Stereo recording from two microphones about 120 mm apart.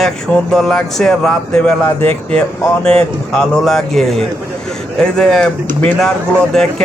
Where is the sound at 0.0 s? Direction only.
5° left (ahead or behind).